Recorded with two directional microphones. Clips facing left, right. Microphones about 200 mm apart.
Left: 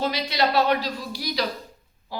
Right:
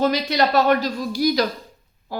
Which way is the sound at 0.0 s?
50° right (ahead or behind).